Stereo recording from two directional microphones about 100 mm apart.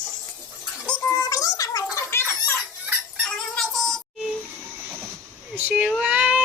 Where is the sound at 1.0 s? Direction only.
35° left (ahead or behind).